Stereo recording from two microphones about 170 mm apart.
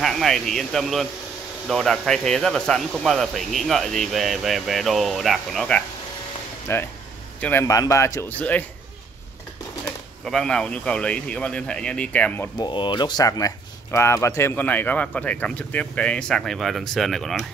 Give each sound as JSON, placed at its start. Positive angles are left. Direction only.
{"t": 0.0, "sound": "speech", "side_deg": 0}
{"t": 6.7, "sound": "a man's voice", "side_deg": 15}
{"t": 7.6, "sound": "speech", "side_deg": 20}
{"t": 10.2, "sound": "speech", "side_deg": 5}
{"t": 12.5, "sound": "speech", "side_deg": 25}